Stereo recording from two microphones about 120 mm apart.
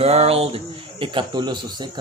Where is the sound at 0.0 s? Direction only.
60° right (ahead or behind).